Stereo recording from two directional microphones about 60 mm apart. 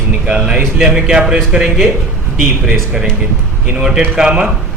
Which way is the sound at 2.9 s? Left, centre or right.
Centre.